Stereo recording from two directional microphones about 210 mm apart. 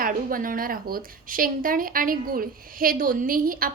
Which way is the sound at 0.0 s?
40° right (ahead or behind).